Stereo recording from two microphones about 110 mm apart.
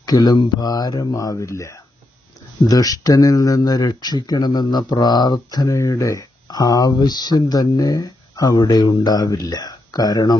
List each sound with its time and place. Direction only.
0.1 s speech: 35° left (ahead or behind)